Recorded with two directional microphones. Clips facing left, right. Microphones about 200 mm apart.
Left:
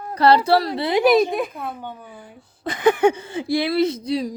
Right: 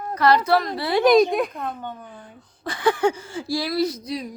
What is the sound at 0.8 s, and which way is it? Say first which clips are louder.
Speech: left 2 dB; 20° left (ahead or behind).